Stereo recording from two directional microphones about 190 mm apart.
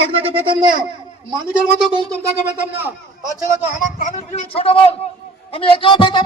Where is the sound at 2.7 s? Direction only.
10° right (ahead or behind).